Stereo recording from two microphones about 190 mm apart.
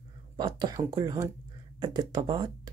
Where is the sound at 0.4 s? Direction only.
25° right (ahead or behind).